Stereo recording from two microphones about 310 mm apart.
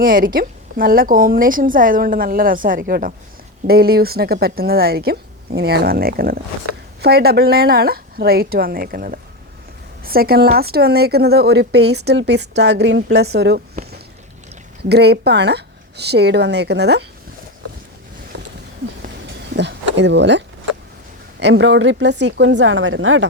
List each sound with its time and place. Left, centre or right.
0.0 s a woman's voice: right
14.8 s a woman's voice: right
19.5 s a woman's voice: right